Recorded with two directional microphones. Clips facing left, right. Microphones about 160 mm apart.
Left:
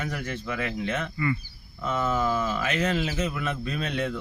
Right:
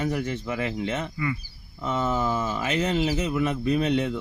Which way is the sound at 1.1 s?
10° right (ahead or behind).